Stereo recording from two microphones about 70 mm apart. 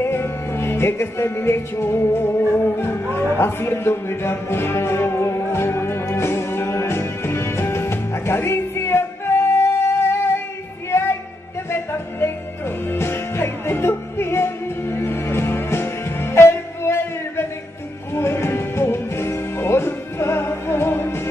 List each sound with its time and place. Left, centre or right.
0.0 s music: left